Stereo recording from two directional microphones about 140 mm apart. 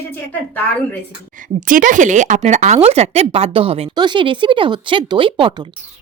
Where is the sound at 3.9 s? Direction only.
30° right (ahead or behind).